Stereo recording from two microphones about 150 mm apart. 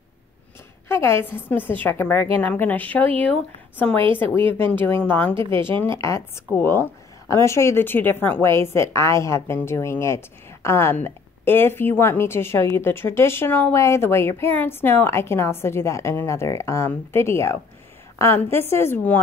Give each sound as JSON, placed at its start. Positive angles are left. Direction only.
{"t": 0.8, "sound": "a woman's voice", "side_deg": 15}
{"t": 4.5, "sound": "a woman's voice", "side_deg": 15}